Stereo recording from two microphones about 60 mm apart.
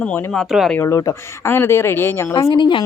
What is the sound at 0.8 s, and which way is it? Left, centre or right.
Speech, left.